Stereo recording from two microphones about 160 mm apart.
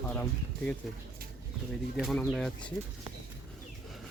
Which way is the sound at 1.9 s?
Centre (ahead or behind).